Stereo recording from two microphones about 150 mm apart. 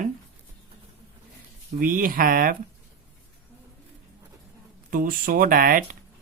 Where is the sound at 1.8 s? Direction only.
65° right (ahead or behind).